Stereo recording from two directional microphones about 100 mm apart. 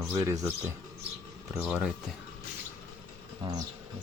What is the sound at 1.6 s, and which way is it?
Speech, 5° right (ahead or behind).